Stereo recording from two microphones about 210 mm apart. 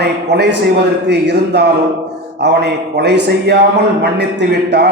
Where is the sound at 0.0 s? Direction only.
55° right (ahead or behind).